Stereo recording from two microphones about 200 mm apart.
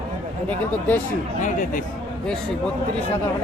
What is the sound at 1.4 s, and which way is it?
Speech, 40° left (ahead or behind).